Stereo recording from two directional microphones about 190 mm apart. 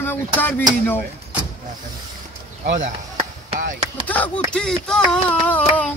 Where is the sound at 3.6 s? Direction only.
45° right (ahead or behind).